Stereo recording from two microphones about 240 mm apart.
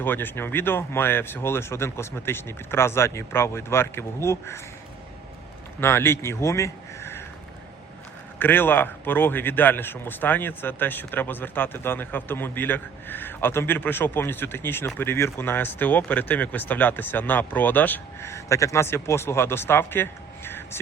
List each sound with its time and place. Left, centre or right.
0.0 s a man's voice: centre
5.8 s speech: centre
8.4 s a man's voice: centre